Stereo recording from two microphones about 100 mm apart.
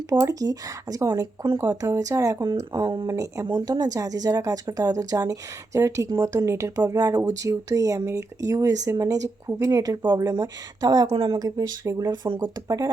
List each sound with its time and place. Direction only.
0.1 s speech: 35° right (ahead or behind)
1.5 s speech: 20° right (ahead or behind)
1.8 s speech: 35° right (ahead or behind)
2.8 s speech: 55° right (ahead or behind)
3.1 s speech: 30° right (ahead or behind)